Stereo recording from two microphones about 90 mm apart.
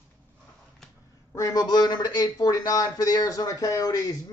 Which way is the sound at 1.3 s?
40° left (ahead or behind).